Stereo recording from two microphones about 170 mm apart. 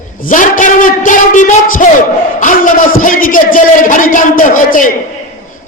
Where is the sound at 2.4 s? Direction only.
50° left (ahead or behind).